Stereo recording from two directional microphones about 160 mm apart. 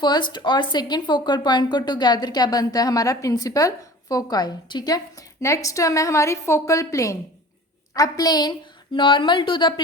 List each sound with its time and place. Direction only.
0.0 s speech: 25° left (ahead or behind)